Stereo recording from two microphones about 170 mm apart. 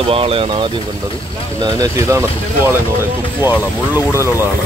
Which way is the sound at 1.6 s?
20° right (ahead or behind).